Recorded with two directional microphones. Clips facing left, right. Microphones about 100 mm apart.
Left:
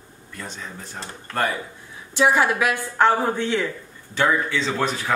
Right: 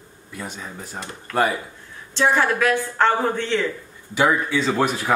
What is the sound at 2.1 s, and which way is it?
A woman's voice, 10° left (ahead or behind).